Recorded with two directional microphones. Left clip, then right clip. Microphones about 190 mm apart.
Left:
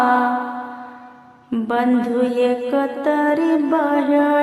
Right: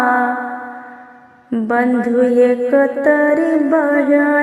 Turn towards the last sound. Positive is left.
turn(degrees=-15)  # may be behind; listen again after turning